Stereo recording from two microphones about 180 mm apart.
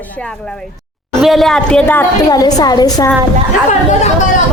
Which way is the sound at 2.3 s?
20° left (ahead or behind).